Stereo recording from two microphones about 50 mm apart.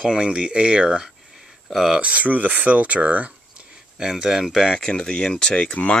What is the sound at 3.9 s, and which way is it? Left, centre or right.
Speech, centre.